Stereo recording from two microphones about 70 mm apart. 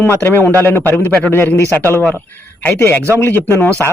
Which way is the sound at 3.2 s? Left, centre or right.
Left.